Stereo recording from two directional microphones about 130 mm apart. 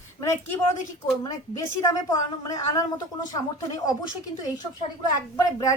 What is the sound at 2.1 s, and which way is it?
A woman's voice, 25° left (ahead or behind).